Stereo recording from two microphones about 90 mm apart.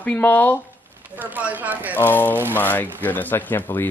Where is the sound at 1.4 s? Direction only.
20° right (ahead or behind).